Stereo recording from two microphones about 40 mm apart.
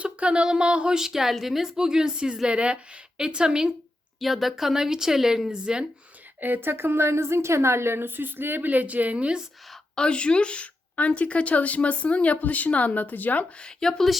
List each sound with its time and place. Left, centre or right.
0.0 s a sound: right
0.9 s a woman's voice: centre
4.2 s a woman's voice: centre
6.4 s a woman's voice: right
8.6 s a woman's voice: right
9.9 s speech: left
13.6 s speech: left